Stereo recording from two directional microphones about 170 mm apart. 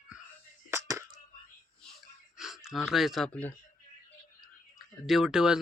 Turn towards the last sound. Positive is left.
turn(degrees=-5)  # may be behind; listen again after turning